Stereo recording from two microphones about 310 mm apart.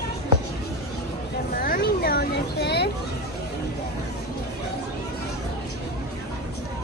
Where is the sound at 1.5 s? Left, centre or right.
Left.